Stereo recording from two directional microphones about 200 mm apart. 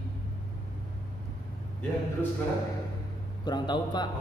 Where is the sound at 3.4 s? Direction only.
20° left (ahead or behind).